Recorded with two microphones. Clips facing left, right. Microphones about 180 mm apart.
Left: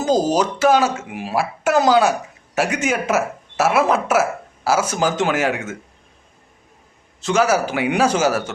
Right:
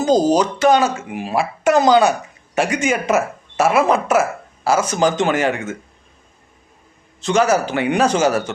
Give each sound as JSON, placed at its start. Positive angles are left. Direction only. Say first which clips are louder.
{"t": 0.0, "sound": "speech", "louder": "right 3 dB", "side_deg": 5}
{"t": 7.2, "sound": "a man's voice", "louder": "right 1 dB", "side_deg": 5}